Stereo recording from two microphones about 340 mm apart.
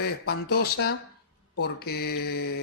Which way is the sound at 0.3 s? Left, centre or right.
Left.